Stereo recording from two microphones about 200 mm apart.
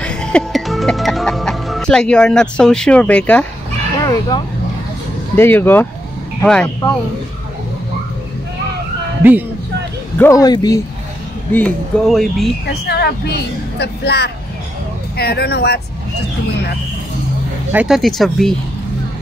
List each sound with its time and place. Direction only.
0.0 s music: 5° left (ahead or behind)
4.0 s speech: 20° left (ahead or behind)
10.1 s speech: 15° left (ahead or behind)
11.5 s speech: 5° left (ahead or behind)
12.6 s speech: 55° left (ahead or behind)
17.7 s speech: centre (ahead or behind)